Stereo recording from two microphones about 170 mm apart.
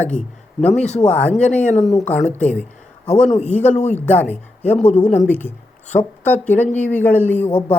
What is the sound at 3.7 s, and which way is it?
Speech, 40° left (ahead or behind).